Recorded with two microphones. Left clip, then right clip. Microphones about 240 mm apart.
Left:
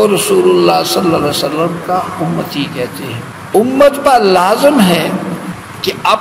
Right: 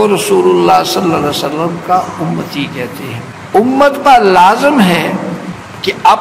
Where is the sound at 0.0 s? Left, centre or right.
Left.